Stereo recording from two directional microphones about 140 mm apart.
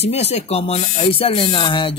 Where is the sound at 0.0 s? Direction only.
50° left (ahead or behind).